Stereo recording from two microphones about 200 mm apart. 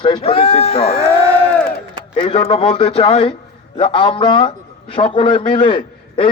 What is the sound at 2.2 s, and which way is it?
A man's voice, 30° left (ahead or behind).